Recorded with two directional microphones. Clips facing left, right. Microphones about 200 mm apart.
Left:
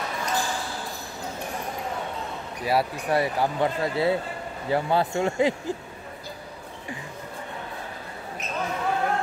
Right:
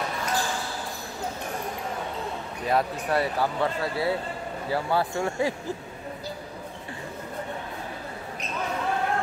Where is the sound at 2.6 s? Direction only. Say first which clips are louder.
Left 1 dB; 10° left (ahead or behind).